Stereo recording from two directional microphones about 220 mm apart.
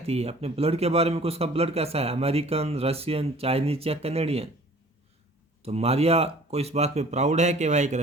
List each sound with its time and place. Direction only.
0.0 s speech: 30° right (ahead or behind)
5.6 s speech: 30° right (ahead or behind)